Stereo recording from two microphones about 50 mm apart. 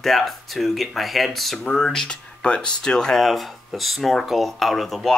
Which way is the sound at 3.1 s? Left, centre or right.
Centre.